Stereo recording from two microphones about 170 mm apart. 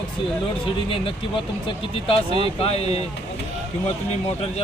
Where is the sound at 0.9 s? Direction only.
30° left (ahead or behind).